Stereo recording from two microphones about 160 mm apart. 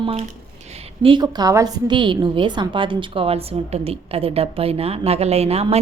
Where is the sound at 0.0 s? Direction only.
40° right (ahead or behind).